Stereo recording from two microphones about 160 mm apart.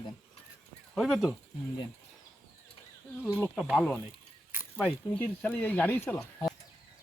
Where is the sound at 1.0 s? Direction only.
Centre (ahead or behind).